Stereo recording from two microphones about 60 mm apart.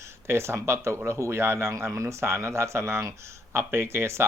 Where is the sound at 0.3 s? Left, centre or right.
Right.